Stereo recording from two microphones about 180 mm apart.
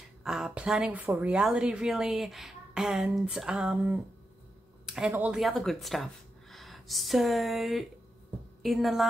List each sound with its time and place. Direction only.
0.2 s speech: 5° right (ahead or behind)